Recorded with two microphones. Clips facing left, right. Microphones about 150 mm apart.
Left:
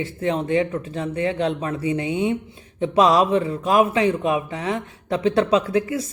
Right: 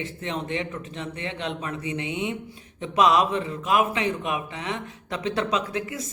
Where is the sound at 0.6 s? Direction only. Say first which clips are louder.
Left 8 dB; 30° left (ahead or behind).